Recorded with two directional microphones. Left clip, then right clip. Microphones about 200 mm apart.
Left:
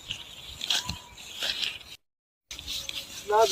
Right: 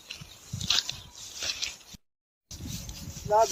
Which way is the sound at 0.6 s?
Centre (ahead or behind).